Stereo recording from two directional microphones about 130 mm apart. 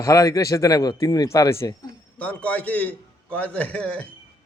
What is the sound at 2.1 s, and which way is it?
A man's voice, 10° left (ahead or behind).